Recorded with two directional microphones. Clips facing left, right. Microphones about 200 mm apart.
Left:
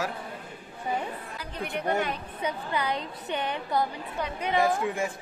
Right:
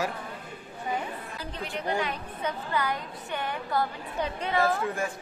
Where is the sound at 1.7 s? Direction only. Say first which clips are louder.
Left 2 dB; 55° left (ahead or behind).